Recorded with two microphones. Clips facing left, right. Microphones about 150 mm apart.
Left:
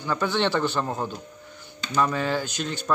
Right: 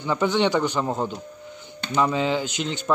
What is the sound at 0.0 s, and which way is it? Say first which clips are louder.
A man's voice: right 3 dB; 15° right (ahead or behind).